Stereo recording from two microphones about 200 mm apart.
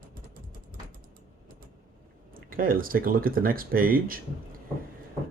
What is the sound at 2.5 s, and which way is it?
Speech, 45° right (ahead or behind).